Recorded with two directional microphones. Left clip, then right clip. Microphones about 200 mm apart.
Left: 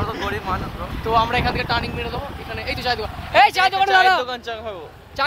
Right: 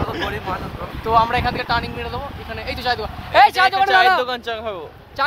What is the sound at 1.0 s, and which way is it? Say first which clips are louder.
Speech: right 2 dB; 5° right (ahead or behind).